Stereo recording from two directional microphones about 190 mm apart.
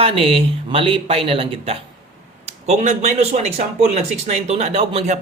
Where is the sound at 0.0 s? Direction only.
30° right (ahead or behind).